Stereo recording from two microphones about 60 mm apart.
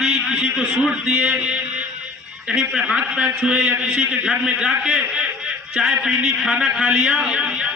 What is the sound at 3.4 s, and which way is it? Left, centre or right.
A man's voice, right.